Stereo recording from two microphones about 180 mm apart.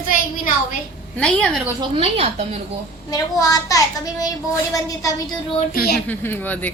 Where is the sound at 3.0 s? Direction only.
20° left (ahead or behind).